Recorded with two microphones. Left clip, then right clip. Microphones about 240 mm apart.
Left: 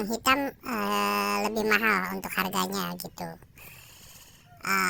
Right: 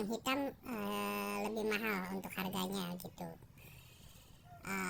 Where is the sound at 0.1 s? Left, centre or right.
Left.